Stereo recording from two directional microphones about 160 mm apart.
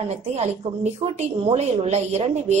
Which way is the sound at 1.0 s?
40° right (ahead or behind).